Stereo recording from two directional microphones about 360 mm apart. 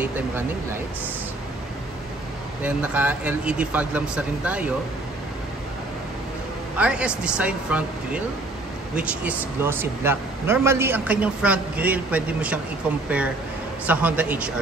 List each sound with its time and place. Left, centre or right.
2.6 s speech: centre
6.8 s speech: centre
13.8 s speech: centre